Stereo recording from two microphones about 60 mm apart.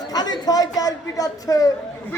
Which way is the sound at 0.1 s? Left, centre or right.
Left.